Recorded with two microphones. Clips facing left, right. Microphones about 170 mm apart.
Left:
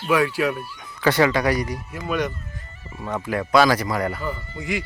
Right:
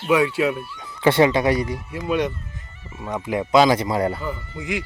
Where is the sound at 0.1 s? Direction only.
20° right (ahead or behind).